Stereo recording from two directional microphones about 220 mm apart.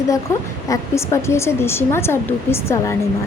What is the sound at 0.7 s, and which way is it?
A woman's voice, 15° left (ahead or behind).